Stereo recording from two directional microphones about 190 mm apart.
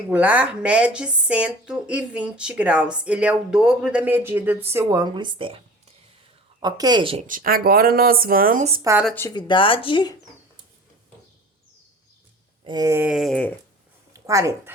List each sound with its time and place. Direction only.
0.1 s speech: 10° right (ahead or behind); by 7.3 s 30° right (ahead or behind)
7.3 s speech: 50° right (ahead or behind)
8.8 s speech: 15° right (ahead or behind)
9.5 s speech: 25° left (ahead or behind)
12.6 s speech: 20° right (ahead or behind); by 13.6 s 5° left (ahead or behind)
14.1 s a woman's voice: 15° right (ahead or behind)